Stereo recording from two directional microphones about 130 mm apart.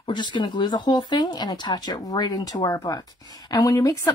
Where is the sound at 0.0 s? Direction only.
35° left (ahead or behind).